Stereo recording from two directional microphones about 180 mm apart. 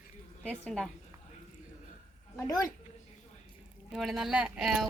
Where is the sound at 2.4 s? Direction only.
20° left (ahead or behind).